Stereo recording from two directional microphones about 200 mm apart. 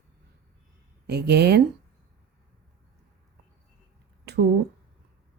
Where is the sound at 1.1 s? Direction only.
55° right (ahead or behind).